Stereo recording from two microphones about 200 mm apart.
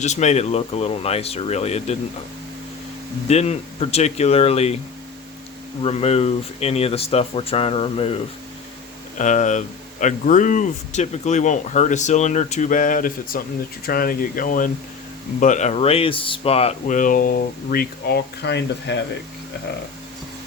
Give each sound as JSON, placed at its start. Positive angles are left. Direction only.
{"t": 0.0, "sound": "speech", "side_deg": 35}
{"t": 3.2, "sound": "speech", "side_deg": 35}
{"t": 5.8, "sound": "speech", "side_deg": 30}
{"t": 9.1, "sound": "speech", "side_deg": 40}